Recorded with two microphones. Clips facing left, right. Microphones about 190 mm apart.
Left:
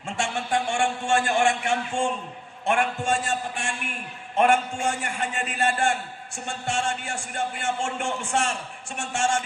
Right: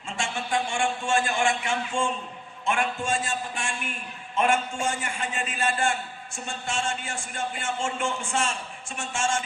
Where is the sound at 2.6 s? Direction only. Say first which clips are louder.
Left 3 dB; 65° left (ahead or behind).